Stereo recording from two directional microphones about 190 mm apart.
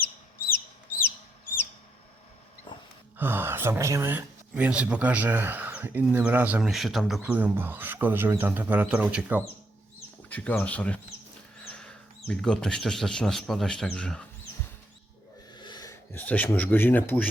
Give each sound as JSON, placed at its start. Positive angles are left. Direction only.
{"t": 2.7, "sound": "a sound", "side_deg": 25}
{"t": 3.2, "sound": "speech", "side_deg": -10}
{"t": 10.2, "sound": "speech", "side_deg": 10}
{"t": 11.6, "sound": "a sound", "side_deg": 5}
{"t": 12.3, "sound": "speech", "side_deg": 5}
{"t": 15.5, "sound": "speech", "side_deg": 20}